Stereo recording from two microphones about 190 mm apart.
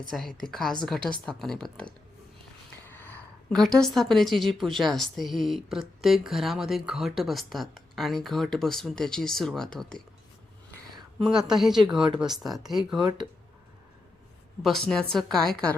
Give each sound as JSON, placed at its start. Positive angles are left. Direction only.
{"t": 0.1, "sound": "a woman's voice", "side_deg": 0}
{"t": 11.3, "sound": "a woman's voice", "side_deg": 0}
{"t": 11.9, "sound": "speech", "side_deg": -25}
{"t": 12.2, "sound": "a woman's voice", "side_deg": 0}
{"t": 13.0, "sound": "speech", "side_deg": -20}
{"t": 14.6, "sound": "a woman's voice", "side_deg": 0}